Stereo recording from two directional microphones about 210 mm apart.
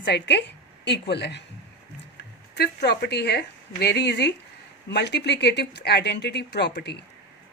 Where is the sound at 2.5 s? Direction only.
50° left (ahead or behind).